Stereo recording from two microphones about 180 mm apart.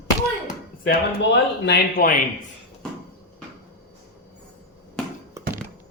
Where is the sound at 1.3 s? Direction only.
70° left (ahead or behind).